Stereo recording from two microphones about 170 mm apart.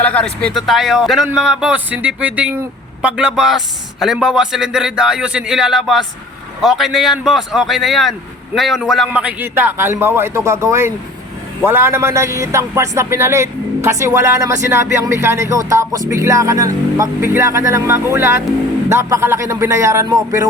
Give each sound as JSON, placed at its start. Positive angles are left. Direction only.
{"t": 0.0, "sound": "a man's voice", "side_deg": 10}